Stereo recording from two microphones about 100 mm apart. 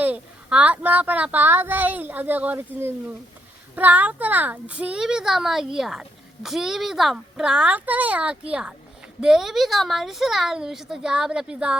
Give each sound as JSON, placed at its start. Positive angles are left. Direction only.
{"t": 0.0, "sound": "a child's voice", "side_deg": -15}